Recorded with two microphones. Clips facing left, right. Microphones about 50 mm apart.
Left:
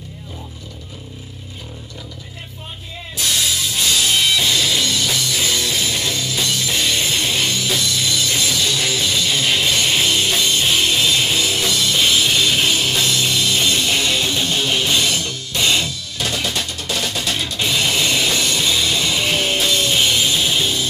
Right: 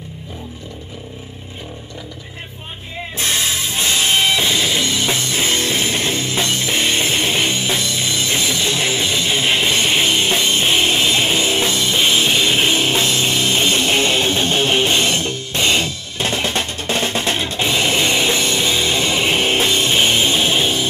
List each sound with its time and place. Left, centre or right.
3.2 s music: right